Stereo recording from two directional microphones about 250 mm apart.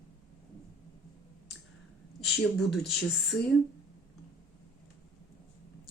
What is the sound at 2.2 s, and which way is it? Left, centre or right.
Speech, centre.